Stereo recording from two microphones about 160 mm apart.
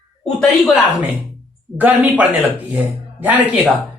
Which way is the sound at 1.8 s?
10° right (ahead or behind).